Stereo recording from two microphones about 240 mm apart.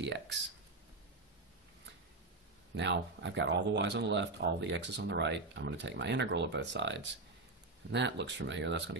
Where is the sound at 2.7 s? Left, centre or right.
Right.